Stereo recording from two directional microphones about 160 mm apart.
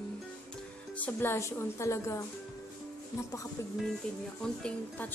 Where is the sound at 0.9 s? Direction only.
10° left (ahead or behind).